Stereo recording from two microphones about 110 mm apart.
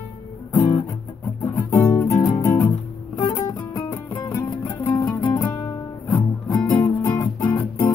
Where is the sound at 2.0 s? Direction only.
30° left (ahead or behind).